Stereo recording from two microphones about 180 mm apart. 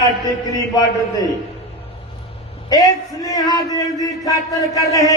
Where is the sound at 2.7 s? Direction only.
20° left (ahead or behind).